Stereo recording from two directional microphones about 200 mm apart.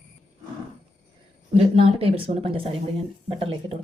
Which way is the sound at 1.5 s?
30° right (ahead or behind).